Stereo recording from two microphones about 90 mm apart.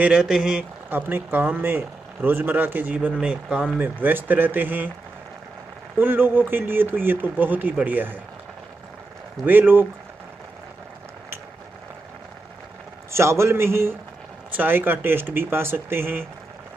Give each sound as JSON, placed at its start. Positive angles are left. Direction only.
{"t": 0.2, "sound": "speech", "side_deg": -5}
{"t": 0.8, "sound": "speech", "side_deg": -20}
{"t": 5.9, "sound": "speech", "side_deg": -20}
{"t": 9.5, "sound": "speech", "side_deg": -25}
{"t": 13.1, "sound": "speech", "side_deg": -30}